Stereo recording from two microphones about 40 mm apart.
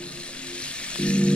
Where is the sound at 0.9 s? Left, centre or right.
Left.